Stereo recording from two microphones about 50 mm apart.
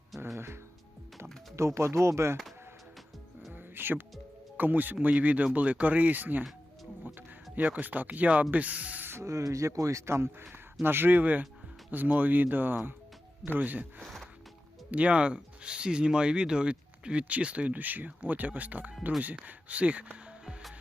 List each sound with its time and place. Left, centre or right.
0.3 s speech: right
1.5 s speech: right
3.5 s music: right
4.5 s speech: right
7.5 s speech: right
9.2 s speech: right
10.8 s speech: right
14.0 s music: centre
14.8 s speech: right